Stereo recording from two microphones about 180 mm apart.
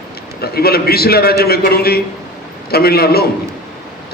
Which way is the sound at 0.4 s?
60° left (ahead or behind).